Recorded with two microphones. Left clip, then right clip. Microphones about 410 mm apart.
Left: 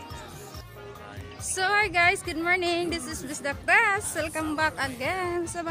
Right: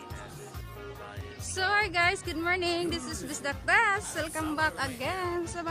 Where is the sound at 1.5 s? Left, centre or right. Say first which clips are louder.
Left 3 dB; right.